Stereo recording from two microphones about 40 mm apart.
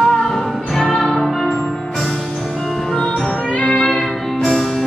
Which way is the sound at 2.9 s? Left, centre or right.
Centre.